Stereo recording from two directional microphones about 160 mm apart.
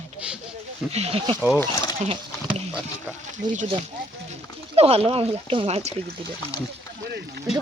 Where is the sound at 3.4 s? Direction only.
25° right (ahead or behind).